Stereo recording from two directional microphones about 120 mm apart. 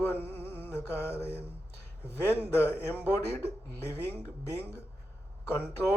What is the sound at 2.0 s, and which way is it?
Speech, 20° left (ahead or behind).